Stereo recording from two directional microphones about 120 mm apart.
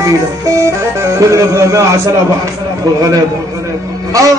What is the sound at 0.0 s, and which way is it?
Speech, 25° right (ahead or behind).